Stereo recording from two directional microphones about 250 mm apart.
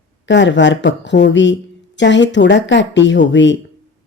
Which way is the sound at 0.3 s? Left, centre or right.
Left.